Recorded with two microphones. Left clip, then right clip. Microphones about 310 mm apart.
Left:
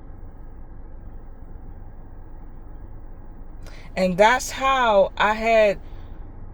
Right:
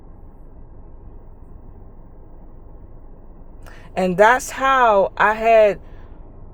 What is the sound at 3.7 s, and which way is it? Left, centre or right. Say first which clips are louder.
Speech: right 2 dB; centre.